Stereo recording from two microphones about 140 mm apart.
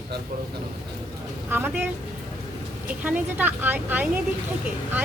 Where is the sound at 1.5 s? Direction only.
15° right (ahead or behind).